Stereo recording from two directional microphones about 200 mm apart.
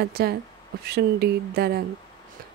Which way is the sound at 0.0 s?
50° right (ahead or behind).